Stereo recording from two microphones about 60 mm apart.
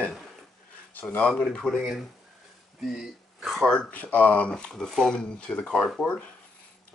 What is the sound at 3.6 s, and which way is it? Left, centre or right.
Speech, centre.